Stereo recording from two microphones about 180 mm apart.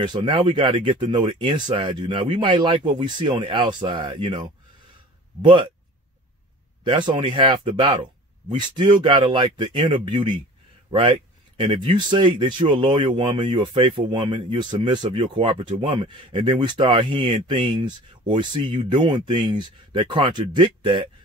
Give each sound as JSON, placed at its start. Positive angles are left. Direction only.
{"t": 0.0, "sound": "speech", "side_deg": -25}
{"t": 6.8, "sound": "speech", "side_deg": -25}